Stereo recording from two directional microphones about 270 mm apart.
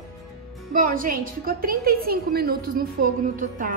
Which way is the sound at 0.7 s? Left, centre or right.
Right.